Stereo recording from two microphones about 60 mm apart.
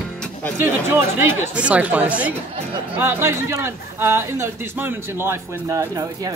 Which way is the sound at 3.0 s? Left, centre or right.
Right.